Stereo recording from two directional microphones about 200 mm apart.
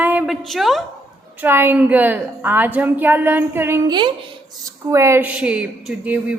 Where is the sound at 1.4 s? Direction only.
10° right (ahead or behind).